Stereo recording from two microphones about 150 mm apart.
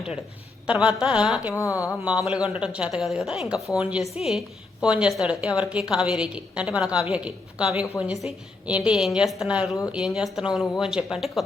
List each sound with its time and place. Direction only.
0.7 s a woman's voice: 5° right (ahead or behind)
1.5 s speech: 20° left (ahead or behind)
2.0 s a woman's voice: 5° right (ahead or behind)